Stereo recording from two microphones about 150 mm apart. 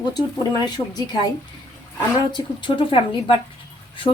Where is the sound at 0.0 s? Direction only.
25° left (ahead or behind).